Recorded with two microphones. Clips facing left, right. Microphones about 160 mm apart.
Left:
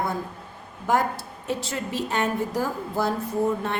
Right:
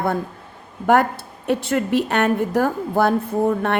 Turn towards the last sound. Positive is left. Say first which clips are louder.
# right 5 dB
turn(degrees=-65)  # may be behind; listen again after turning